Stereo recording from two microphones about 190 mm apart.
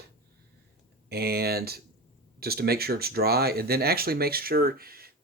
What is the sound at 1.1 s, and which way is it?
Speech, 55° right (ahead or behind).